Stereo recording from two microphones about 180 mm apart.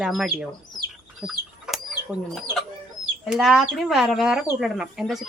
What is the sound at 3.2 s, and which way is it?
Speech, centre (ahead or behind).